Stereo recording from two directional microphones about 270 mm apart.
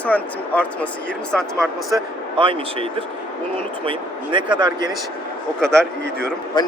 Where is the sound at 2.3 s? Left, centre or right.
Centre.